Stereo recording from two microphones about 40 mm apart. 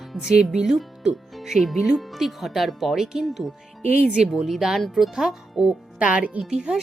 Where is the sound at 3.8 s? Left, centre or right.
Right.